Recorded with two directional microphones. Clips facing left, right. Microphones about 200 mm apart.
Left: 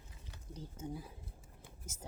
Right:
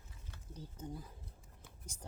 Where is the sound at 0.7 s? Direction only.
10° left (ahead or behind).